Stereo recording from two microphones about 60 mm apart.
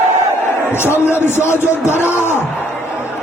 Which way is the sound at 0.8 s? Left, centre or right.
Left.